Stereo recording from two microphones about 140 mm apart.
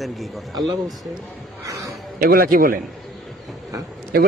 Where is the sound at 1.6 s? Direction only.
25° right (ahead or behind).